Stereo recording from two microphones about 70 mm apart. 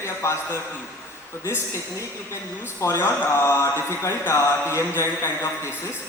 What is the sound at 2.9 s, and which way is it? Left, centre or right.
Speech, left.